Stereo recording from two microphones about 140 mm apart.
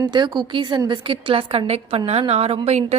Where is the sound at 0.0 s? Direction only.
35° right (ahead or behind).